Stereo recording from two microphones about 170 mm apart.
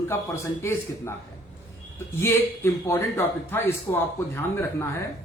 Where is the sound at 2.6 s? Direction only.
15° left (ahead or behind).